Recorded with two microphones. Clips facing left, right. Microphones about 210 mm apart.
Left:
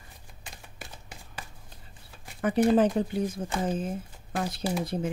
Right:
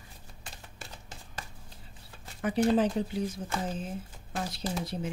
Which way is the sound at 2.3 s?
55° left (ahead or behind).